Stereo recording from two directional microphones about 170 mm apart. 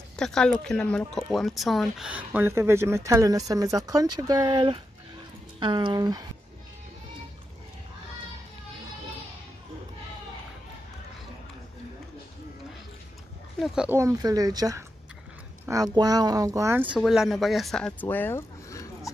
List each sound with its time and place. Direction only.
0.1 s speech: 5° left (ahead or behind); by 6.2 s 25° right (ahead or behind)
13.6 s speech: 5° right (ahead or behind)
13.9 s speech: 20° right (ahead or behind)
16.9 s speech: 5° right (ahead or behind); by 18.9 s 15° left (ahead or behind)